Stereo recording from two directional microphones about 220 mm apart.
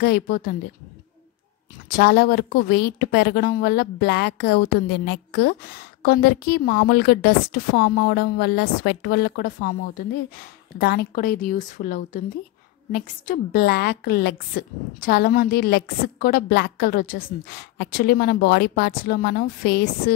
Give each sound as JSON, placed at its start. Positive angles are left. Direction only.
{"t": 0.0, "sound": "a woman's voice", "side_deg": 45}
{"t": 2.0, "sound": "a woman's voice", "side_deg": 45}